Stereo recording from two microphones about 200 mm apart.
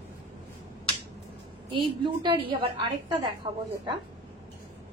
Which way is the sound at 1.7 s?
25° right (ahead or behind).